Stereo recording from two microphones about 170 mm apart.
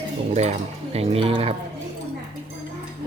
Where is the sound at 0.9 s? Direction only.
35° right (ahead or behind).